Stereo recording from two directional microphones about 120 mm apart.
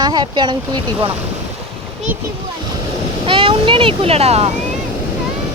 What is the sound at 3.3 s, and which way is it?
Vehicle, 45° right (ahead or behind).